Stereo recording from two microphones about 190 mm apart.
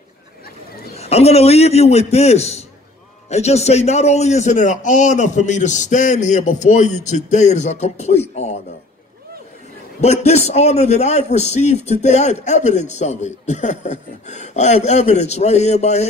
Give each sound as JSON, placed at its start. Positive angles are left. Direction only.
{"t": 0.9, "sound": "a man's voice", "side_deg": 35}
{"t": 9.9, "sound": "a man's voice", "side_deg": 35}